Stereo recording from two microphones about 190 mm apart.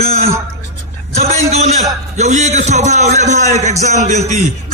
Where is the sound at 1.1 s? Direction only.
35° right (ahead or behind).